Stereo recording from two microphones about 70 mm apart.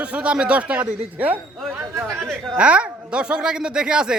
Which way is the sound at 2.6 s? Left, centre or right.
Centre.